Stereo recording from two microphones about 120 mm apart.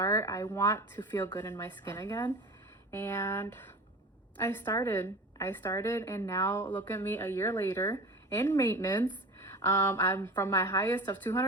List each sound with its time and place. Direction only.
0.0 s a woman's voice: 25° left (ahead or behind)
2.0 s speech: 30° left (ahead or behind)
2.9 s a woman's voice: 20° left (ahead or behind)